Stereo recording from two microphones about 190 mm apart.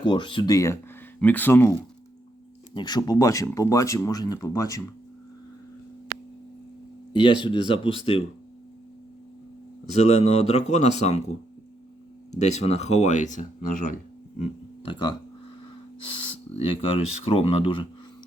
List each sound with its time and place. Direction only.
0.0 s speech: 25° left (ahead or behind); by 1.7 s 10° left (ahead or behind)
2.7 s speech: 20° left (ahead or behind)
7.1 s speech: 25° left (ahead or behind)
9.9 s speech: 35° left (ahead or behind)
12.3 s speech: 35° left (ahead or behind)
14.3 s a sound: 35° left (ahead or behind)
16.6 s speech: 30° left (ahead or behind)